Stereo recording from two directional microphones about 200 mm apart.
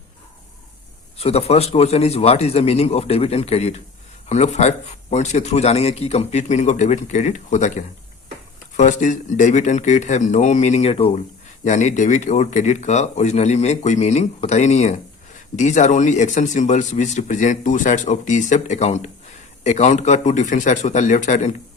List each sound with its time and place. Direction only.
1.2 s speech: 30° left (ahead or behind)